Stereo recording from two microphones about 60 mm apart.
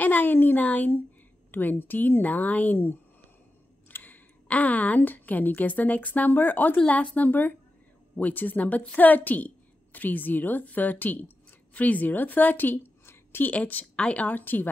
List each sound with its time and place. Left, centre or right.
0.0 s a woman's voice: left
13.5 s a woman's voice: left